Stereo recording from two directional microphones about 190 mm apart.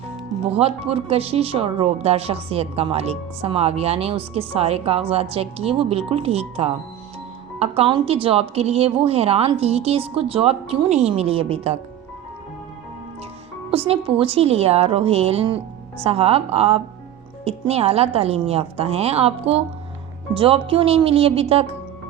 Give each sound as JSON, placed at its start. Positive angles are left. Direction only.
{"t": 0.5, "sound": "speech", "side_deg": -30}
{"t": 13.7, "sound": "speech", "side_deg": -30}